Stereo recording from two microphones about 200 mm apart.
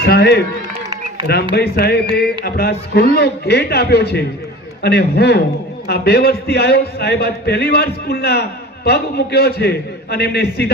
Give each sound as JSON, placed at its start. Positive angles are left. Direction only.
{"t": 0.1, "sound": "a man's voice", "side_deg": 50}
{"t": 1.5, "sound": "a man's voice", "side_deg": 50}